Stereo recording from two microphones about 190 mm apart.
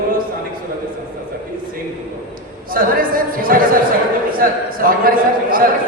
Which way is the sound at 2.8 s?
50° right (ahead or behind).